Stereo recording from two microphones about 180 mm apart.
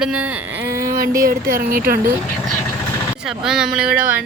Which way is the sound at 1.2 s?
50° right (ahead or behind).